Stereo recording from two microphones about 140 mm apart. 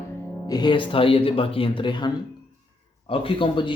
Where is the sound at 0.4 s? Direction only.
30° left (ahead or behind).